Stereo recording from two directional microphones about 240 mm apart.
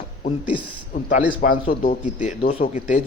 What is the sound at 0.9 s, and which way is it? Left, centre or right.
A man's voice, left.